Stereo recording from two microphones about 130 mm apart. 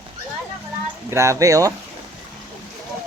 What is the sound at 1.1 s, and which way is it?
Speech, 20° right (ahead or behind).